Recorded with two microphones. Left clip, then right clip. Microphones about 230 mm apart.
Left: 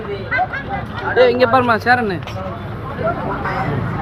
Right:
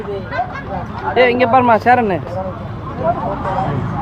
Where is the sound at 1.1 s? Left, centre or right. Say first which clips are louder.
Right 1 dB; right.